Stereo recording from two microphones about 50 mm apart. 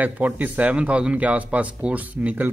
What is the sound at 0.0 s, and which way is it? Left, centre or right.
Speech, right.